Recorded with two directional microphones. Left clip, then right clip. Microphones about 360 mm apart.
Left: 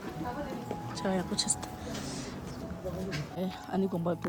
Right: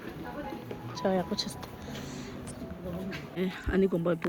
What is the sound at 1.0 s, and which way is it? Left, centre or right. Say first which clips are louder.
Speech: right 3 dB; centre.